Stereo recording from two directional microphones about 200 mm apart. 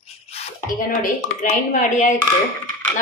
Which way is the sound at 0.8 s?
40° left (ahead or behind).